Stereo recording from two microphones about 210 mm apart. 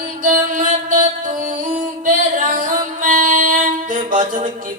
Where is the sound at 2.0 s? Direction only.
40° right (ahead or behind).